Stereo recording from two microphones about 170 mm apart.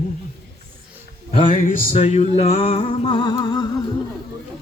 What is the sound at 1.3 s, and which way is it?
Music, 45° left (ahead or behind).